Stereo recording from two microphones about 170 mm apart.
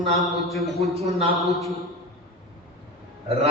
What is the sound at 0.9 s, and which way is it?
Speech, 40° right (ahead or behind).